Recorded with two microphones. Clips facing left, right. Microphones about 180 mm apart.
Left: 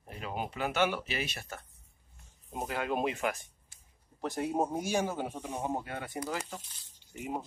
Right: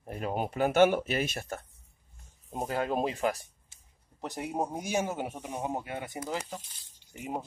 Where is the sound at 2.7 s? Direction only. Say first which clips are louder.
Right 2 dB; 35° right (ahead or behind).